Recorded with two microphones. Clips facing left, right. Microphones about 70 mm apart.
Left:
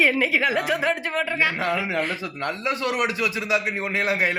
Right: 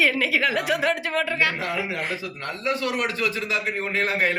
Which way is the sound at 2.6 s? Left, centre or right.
Left.